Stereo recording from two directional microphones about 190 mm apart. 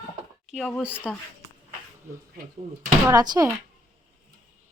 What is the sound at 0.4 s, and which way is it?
Speech, 5° left (ahead or behind).